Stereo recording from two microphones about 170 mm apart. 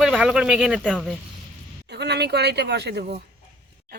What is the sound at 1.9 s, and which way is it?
Speech, 80° right.